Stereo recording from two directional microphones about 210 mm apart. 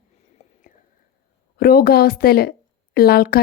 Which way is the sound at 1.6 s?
45° left (ahead or behind).